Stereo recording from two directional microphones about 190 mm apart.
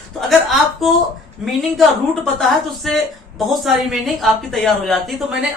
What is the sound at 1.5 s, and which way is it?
Speech, centre (ahead or behind).